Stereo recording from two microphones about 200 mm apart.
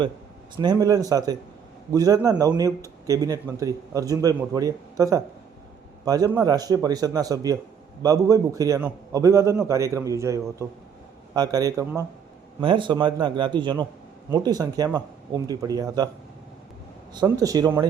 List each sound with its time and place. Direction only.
0.5 s a man's voice: 20° right (ahead or behind)
17.2 s a man's voice: 15° right (ahead or behind)